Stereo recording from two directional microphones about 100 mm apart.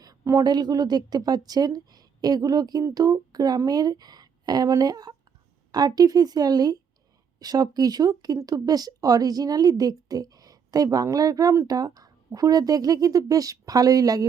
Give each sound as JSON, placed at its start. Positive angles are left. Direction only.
{"t": 0.0, "sound": "speech", "side_deg": -35}